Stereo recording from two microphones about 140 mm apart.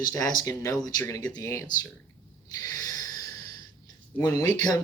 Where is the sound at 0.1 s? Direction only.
25° left (ahead or behind).